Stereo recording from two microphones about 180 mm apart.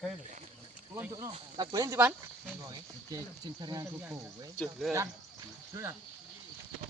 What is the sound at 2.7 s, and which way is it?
Speech, 20° right (ahead or behind).